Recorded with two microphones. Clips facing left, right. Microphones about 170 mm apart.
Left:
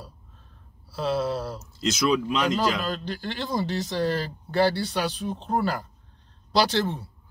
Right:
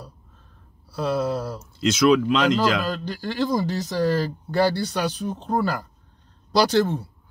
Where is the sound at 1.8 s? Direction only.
55° right (ahead or behind); by 2.8 s 85° right.